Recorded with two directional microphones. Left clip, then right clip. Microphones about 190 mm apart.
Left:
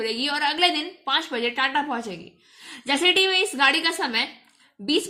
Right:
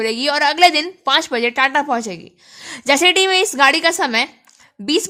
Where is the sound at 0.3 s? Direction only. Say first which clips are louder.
Right 9 dB; 60° right (ahead or behind).